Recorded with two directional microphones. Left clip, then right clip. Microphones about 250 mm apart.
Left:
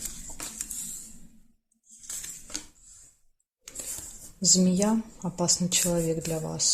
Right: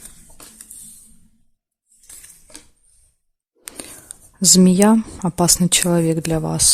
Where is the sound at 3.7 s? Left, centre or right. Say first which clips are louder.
Right 7 dB; right.